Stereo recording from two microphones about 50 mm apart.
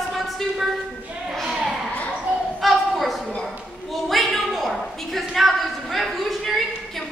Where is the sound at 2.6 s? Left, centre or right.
Centre.